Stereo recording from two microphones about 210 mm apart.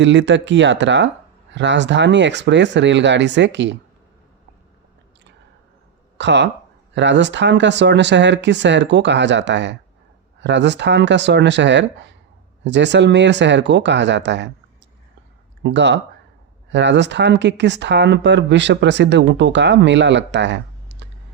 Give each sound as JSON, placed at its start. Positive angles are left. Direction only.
{"t": 0.0, "sound": "speech", "side_deg": -60}
{"t": 6.1, "sound": "speech", "side_deg": -55}
{"t": 15.6, "sound": "speech", "side_deg": -55}